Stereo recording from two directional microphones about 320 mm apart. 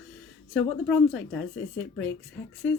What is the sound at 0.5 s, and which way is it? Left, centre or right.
Speech, centre.